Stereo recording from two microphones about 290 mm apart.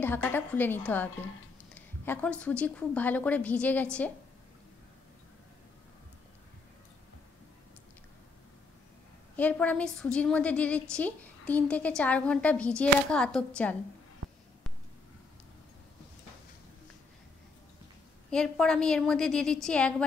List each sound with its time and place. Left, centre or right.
0.0 s a woman's voice: centre
1.7 s a sound: centre
2.4 s a woman's voice: centre
9.4 s a woman's voice: centre
18.3 s a woman's voice: centre